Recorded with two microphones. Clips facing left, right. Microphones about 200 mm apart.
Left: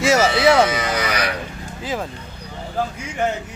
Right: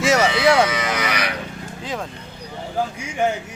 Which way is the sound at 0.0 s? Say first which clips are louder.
Left 1 dB; centre (ahead or behind).